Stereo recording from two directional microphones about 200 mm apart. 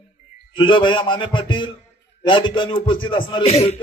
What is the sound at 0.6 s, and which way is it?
A man's voice, 25° left (ahead or behind).